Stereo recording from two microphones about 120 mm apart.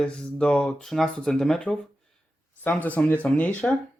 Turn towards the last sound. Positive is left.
turn(degrees=10)  # may be behind; listen again after turning